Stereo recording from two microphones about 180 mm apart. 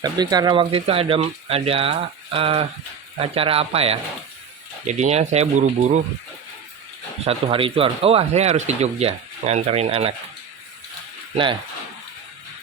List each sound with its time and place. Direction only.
0.0 s speech: 20° right (ahead or behind); by 6.0 s 40° right (ahead or behind)
7.3 s speech: 30° right (ahead or behind)